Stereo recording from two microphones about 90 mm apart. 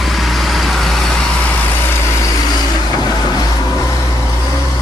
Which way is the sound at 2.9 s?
45° left (ahead or behind).